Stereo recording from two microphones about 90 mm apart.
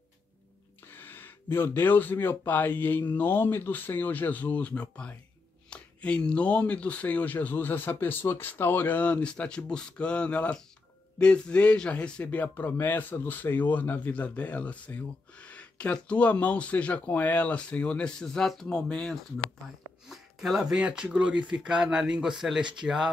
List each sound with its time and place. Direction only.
0.8 s a man's voice: 20° left (ahead or behind); by 23.0 s 5° right (ahead or behind)